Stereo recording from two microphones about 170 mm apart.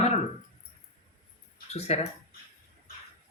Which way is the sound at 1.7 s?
40° left (ahead or behind).